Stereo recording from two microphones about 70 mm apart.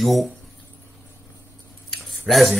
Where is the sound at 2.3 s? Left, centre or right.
Centre.